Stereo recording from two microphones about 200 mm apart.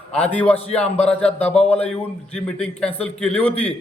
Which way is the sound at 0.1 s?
5° left (ahead or behind).